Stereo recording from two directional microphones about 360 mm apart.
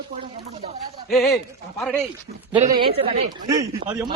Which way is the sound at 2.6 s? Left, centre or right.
Centre.